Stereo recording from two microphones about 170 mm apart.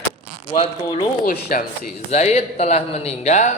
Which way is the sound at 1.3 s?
55° left (ahead or behind).